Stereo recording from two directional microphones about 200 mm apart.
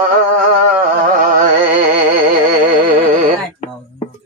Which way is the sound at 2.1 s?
40° right (ahead or behind).